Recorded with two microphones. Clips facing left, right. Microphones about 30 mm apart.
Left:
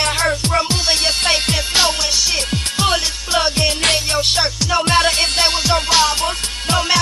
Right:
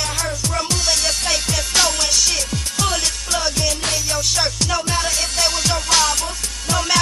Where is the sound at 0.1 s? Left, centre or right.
Left.